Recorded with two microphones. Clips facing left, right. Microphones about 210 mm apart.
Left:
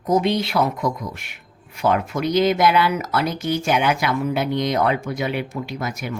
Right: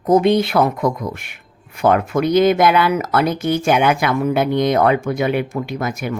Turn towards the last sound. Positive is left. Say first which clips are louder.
# right 5 dB
turn(degrees=-55)  # may be behind; listen again after turning